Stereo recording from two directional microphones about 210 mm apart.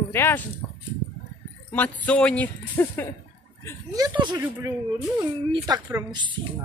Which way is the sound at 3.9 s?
20° right (ahead or behind).